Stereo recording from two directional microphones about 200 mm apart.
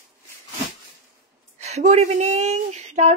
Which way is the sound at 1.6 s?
35° right (ahead or behind).